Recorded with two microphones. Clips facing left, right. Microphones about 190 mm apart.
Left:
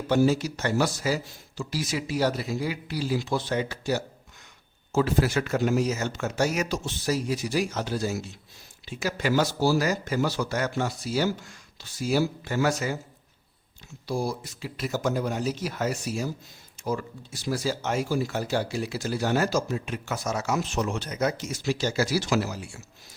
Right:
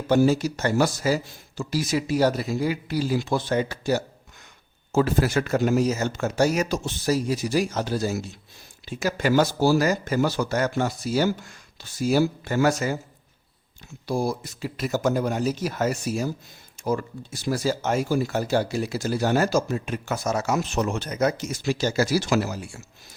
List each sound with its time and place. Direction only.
0.1 s speech: 45° right (ahead or behind)
14.1 s speech: 50° right (ahead or behind)